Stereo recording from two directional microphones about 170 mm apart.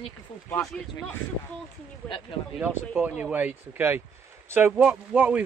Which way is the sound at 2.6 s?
5° right (ahead or behind).